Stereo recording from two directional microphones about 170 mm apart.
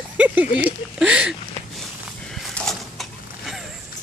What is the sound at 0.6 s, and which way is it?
Speech, 5° right (ahead or behind).